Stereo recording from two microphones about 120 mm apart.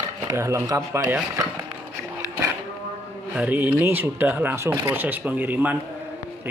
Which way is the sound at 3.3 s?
15° right (ahead or behind).